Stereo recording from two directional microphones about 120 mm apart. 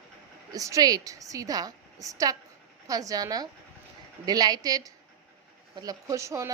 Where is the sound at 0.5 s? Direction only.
30° right (ahead or behind).